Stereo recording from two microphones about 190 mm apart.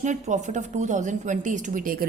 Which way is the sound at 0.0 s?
40° right (ahead or behind).